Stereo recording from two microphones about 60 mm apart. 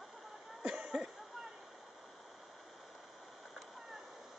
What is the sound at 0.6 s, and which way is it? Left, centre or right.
Cough, centre.